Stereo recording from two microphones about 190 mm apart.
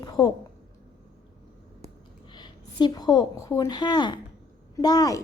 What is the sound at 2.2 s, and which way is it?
A woman's voice, 25° left (ahead or behind).